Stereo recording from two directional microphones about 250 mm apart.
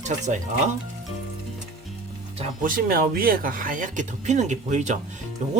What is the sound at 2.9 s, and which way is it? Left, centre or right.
Speech, right.